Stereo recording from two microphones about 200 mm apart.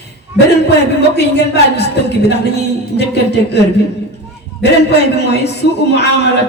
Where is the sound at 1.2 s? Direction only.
55° left (ahead or behind).